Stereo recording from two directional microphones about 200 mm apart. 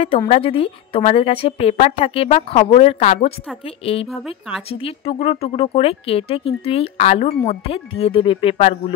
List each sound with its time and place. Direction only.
0.3 s speech: 30° left (ahead or behind)